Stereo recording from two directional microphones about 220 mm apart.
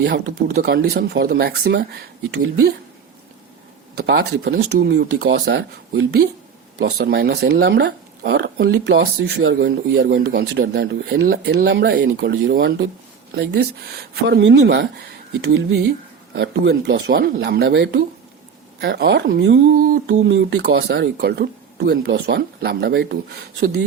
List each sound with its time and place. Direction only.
0.0 s speech: 50° right (ahead or behind)
3.9 s speech: 50° right (ahead or behind)